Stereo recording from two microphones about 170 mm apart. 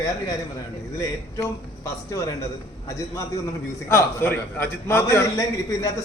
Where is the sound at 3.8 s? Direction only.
15° left (ahead or behind).